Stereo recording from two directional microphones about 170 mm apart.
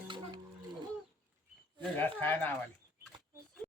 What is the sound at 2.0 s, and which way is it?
Speech, 10° left (ahead or behind).